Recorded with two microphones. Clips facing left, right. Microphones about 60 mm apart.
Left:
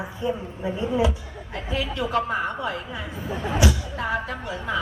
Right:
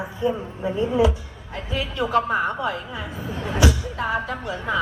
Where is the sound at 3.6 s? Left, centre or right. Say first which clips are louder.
Right 5 dB; right.